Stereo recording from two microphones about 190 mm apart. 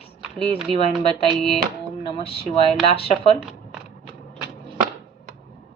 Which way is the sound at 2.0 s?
30° left (ahead or behind).